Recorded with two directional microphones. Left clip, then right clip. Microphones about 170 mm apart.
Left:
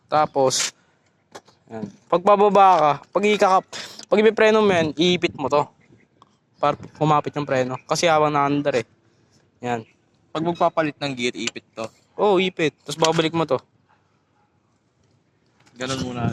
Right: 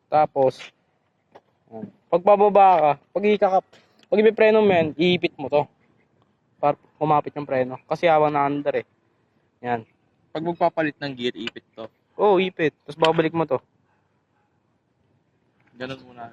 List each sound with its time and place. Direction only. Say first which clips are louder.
0.1 s speech: even; 25° left (ahead or behind)
10.3 s a man's voice: left 2 dB; 35° left (ahead or behind)
11.9 s speech: right 1 dB; 20° left (ahead or behind)
15.9 s speech: left 10 dB; 20° left (ahead or behind)